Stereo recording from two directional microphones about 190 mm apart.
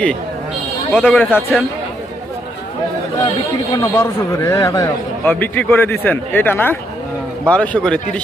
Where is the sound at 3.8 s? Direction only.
15° left (ahead or behind).